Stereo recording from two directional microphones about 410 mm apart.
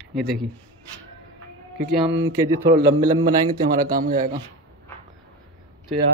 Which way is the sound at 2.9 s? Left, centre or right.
Centre.